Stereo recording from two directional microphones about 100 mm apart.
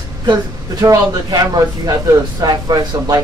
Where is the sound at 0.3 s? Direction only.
40° right (ahead or behind).